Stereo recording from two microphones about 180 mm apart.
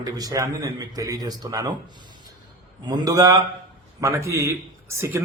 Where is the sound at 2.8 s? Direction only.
25° right (ahead or behind).